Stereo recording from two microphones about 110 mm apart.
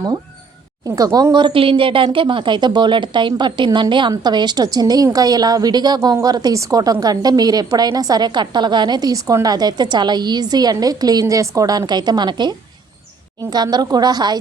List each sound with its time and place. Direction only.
0.9 s a woman's voice: 35° right (ahead or behind)